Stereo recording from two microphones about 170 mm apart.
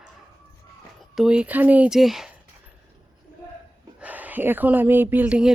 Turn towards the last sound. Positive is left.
turn(degrees=-10)  # may be behind; listen again after turning